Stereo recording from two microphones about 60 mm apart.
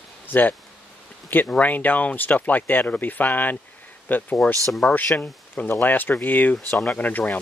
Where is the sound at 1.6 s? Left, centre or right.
Left.